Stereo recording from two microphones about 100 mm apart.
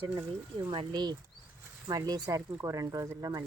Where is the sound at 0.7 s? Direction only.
60° right (ahead or behind).